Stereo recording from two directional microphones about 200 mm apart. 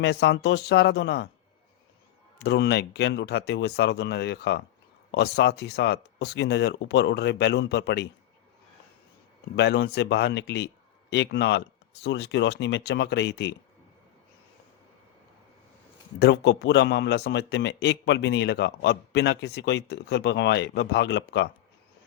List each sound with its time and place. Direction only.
0.0 s a man's voice: 55° left (ahead or behind)
2.4 s a man's voice: 60° left (ahead or behind)
9.6 s a man's voice: 55° left (ahead or behind)
16.1 s a man's voice: 55° left (ahead or behind)